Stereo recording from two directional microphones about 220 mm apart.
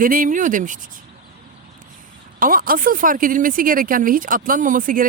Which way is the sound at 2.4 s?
40° right (ahead or behind).